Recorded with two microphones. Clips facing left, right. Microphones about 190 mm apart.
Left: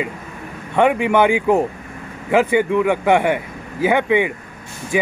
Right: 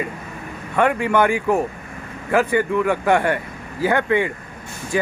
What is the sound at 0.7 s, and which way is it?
Speech, 15° left (ahead or behind).